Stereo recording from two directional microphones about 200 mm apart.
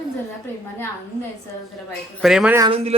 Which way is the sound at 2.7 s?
30° right (ahead or behind).